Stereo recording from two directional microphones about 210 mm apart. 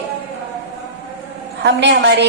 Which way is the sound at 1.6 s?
55° right (ahead or behind).